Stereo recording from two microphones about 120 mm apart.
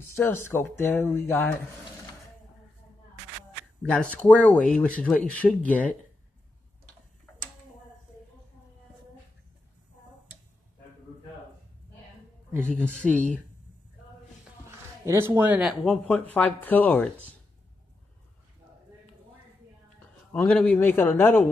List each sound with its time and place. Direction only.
0.1 s speech: 20° left (ahead or behind)
3.8 s speech: 10° left (ahead or behind)
12.6 s speech: 10° left (ahead or behind)
15.0 s speech: 20° right (ahead or behind)
15.8 s speech: 10° left (ahead or behind)
20.3 s speech: 15° left (ahead or behind)